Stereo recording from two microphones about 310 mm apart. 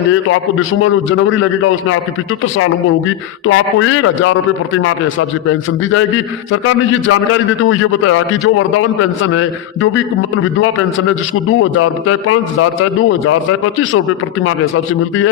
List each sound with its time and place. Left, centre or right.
0.8 s a man's voice: left
3.4 s a man's voice: left
11.4 s a man's voice: left